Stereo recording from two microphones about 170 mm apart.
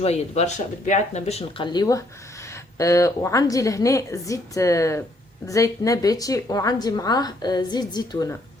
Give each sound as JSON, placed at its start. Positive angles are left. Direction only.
{"t": 0.0, "sound": "a woman's voice", "side_deg": 40}